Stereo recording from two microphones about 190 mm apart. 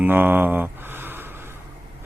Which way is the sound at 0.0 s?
10° right (ahead or behind).